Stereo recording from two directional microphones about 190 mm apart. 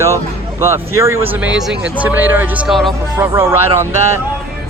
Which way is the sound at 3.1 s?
15° right (ahead or behind).